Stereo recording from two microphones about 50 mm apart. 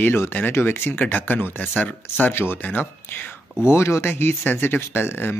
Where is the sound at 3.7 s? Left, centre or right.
Left.